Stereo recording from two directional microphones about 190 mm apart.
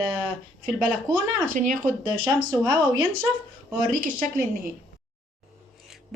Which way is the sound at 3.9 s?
45° right (ahead or behind).